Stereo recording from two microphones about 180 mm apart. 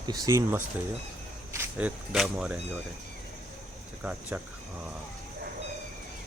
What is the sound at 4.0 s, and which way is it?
Speech, 5° right (ahead or behind).